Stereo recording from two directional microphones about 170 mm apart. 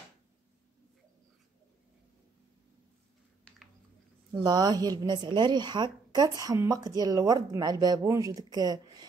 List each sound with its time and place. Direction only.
4.3 s a woman's voice: 25° right (ahead or behind)